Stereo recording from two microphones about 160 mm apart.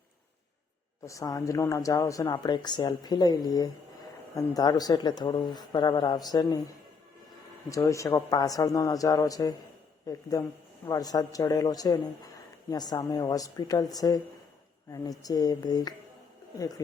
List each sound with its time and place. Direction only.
1.0 s speech: 20° left (ahead or behind)
7.7 s speech: 20° left (ahead or behind)